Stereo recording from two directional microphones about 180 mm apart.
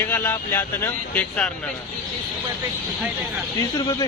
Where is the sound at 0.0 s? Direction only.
10° left (ahead or behind).